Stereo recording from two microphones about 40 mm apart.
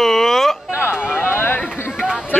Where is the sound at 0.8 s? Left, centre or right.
Left.